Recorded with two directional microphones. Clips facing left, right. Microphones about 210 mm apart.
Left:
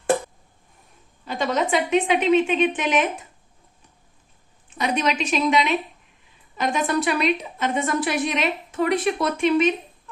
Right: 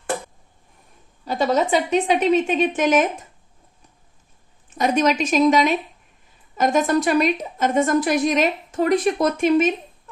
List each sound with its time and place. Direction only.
1.2 s a woman's voice: 40° right (ahead or behind)
4.7 s a woman's voice: 45° right (ahead or behind)